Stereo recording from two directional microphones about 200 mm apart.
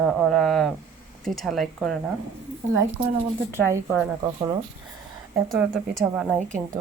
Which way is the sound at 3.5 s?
10° right (ahead or behind).